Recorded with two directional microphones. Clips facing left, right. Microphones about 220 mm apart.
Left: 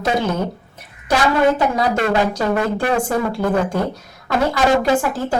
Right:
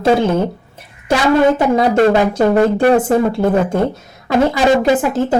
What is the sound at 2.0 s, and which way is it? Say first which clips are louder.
Speech: right 6 dB; 45° right (ahead or behind).